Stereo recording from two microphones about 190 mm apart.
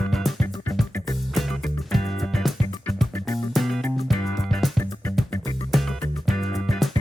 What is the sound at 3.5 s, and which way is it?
Music, centre (ahead or behind).